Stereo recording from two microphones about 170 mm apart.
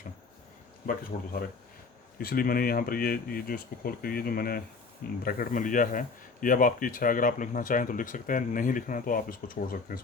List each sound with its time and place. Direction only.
0.9 s speech: 60° left (ahead or behind)